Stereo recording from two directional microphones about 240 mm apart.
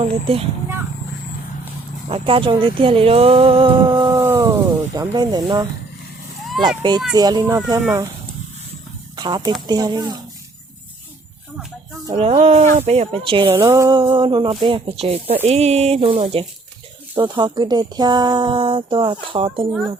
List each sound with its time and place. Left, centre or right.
0.0 s speech: right
2.0 s speech: right
9.1 s speech: centre
12.1 s speech: right